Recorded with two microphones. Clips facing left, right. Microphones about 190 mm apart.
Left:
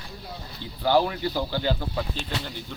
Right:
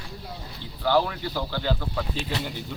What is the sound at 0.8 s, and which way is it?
Speech, 25° left (ahead or behind).